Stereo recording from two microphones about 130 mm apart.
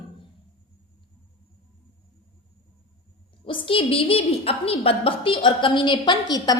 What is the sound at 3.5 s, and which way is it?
A woman's voice, 45° left (ahead or behind).